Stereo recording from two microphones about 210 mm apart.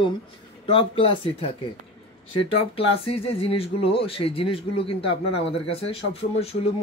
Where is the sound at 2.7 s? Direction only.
25° left (ahead or behind).